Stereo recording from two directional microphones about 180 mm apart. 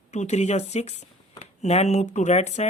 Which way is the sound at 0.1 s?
40° left (ahead or behind).